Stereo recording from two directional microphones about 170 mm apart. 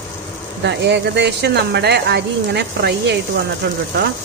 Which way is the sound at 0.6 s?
85° right.